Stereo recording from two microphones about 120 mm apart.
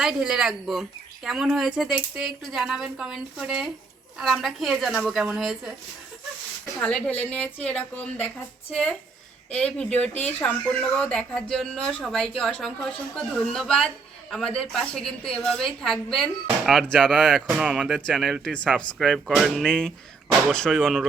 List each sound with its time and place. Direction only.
0.0 s speech: 5° right (ahead or behind)
6.7 s speech: 5° left (ahead or behind)
19.6 s speech: 5° left (ahead or behind)